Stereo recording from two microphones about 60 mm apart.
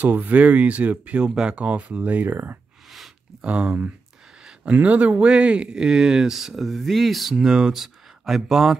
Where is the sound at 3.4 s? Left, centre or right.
Right; by 8.7 s centre.